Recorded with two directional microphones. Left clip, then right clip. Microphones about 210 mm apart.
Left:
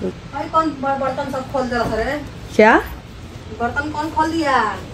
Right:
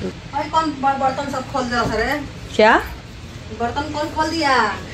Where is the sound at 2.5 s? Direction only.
30° left (ahead or behind).